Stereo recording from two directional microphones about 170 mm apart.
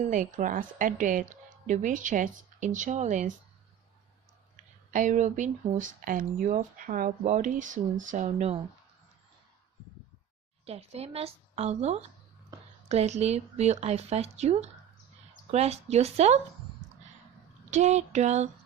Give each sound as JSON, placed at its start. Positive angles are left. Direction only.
{"t": 0.0, "sound": "speech", "side_deg": -50}
{"t": 4.9, "sound": "speech", "side_deg": -45}
{"t": 10.7, "sound": "speech", "side_deg": -35}
{"t": 17.7, "sound": "speech", "side_deg": -40}